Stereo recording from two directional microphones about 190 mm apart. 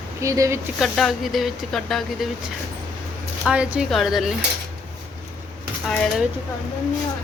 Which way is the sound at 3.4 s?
5° right (ahead or behind).